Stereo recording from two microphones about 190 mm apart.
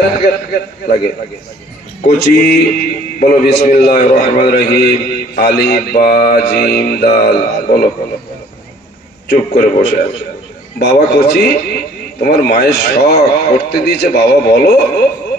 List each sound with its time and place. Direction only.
0.5 s a man's voice: 55° left (ahead or behind)
2.0 s a man's voice: 55° left (ahead or behind)
9.3 s a man's voice: 60° left (ahead or behind)